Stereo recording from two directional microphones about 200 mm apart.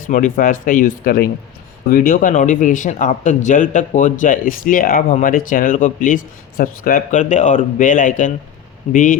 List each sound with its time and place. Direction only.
0.1 s speech: 40° left (ahead or behind)